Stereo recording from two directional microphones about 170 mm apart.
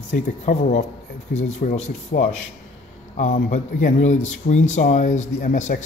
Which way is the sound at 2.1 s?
60° left (ahead or behind).